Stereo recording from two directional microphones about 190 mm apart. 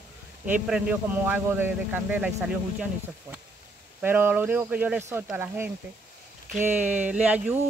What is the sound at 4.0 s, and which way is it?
Speech, 10° right (ahead or behind).